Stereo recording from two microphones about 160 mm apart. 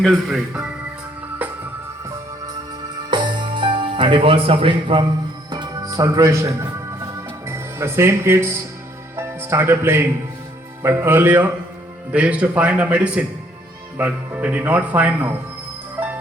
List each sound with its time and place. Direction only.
0.0 s speech: centre (ahead or behind)
1.4 s music: 10° right (ahead or behind)
3.1 s music: 30° right (ahead or behind)
10.8 s speech: 15° right (ahead or behind)